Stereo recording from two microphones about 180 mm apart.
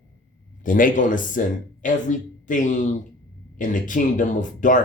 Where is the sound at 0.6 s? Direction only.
50° left (ahead or behind).